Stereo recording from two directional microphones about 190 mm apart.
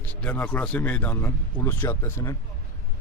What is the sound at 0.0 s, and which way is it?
Speech, 10° left (ahead or behind).